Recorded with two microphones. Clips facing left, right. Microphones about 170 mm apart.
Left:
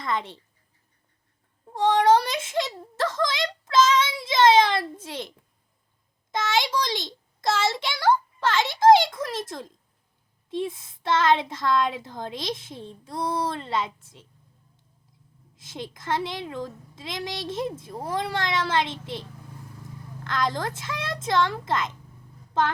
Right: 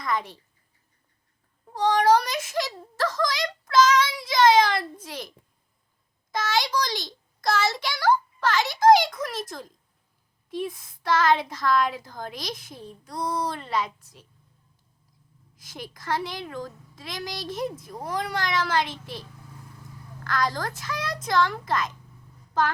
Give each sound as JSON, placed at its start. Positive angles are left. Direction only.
{"t": 0.0, "sound": "a child's voice", "side_deg": 25}
{"t": 1.7, "sound": "a child's voice", "side_deg": 25}
{"t": 6.3, "sound": "a child's voice", "side_deg": 20}
{"t": 15.5, "sound": "a child's voice", "side_deg": 25}